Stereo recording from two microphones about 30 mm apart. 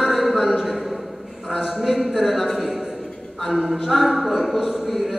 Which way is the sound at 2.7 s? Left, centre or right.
Centre.